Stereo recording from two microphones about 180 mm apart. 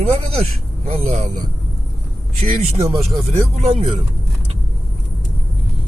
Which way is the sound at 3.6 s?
35° right (ahead or behind).